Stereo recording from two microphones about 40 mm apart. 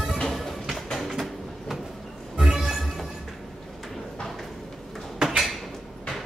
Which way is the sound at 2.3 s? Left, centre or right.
Centre.